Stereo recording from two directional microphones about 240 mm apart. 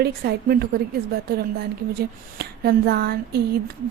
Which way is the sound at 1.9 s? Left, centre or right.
Right.